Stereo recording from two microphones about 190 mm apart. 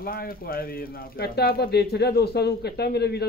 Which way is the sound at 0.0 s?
50° left (ahead or behind).